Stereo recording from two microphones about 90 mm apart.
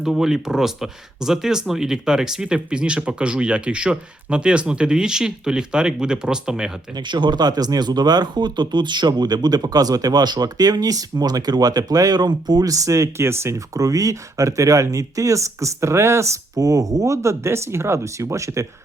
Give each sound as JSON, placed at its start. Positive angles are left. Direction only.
{"t": 0.0, "sound": "speech", "side_deg": -5}
{"t": 6.9, "sound": "speech", "side_deg": -55}